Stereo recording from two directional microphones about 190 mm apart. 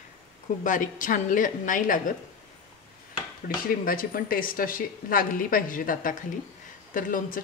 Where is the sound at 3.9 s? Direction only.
50° left (ahead or behind).